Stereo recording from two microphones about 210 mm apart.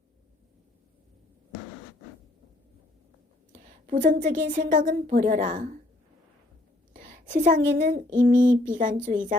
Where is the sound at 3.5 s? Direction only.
35° right (ahead or behind).